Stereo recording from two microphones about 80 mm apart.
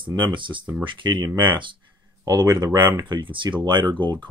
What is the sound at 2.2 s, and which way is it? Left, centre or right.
Speech, right.